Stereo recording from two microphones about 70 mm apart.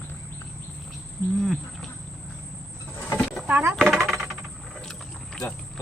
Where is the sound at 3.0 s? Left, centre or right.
Left.